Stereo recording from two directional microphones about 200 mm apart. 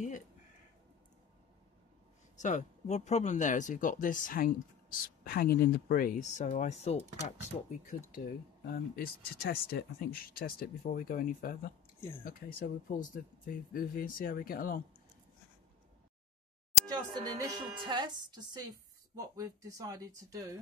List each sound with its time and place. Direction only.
2.3 s speech: 35° left (ahead or behind)
8.6 s speech: 50° left (ahead or behind)
16.9 s speech: 20° right (ahead or behind)